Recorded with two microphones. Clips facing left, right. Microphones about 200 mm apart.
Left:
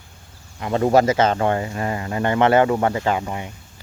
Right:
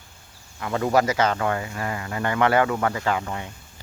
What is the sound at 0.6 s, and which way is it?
Speech, 25° left (ahead or behind).